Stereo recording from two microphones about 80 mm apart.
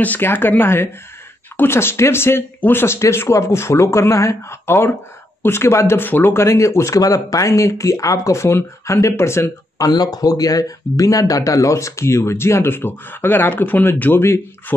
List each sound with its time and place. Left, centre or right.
0.0 s speech: left
9.8 s speech: left